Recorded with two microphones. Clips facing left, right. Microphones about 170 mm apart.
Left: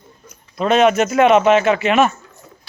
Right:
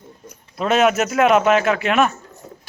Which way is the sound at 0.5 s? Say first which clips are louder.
Left 3 dB; 5° right (ahead or behind).